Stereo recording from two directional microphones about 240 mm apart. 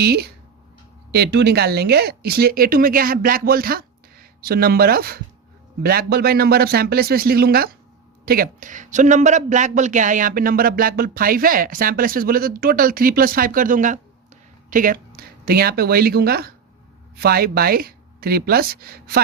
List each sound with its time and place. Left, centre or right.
0.0 s speech: right